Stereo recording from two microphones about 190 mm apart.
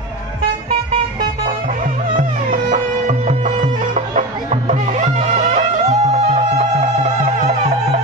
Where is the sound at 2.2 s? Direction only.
45° right (ahead or behind).